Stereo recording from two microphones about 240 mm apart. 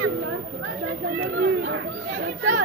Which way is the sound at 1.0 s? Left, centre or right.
Right.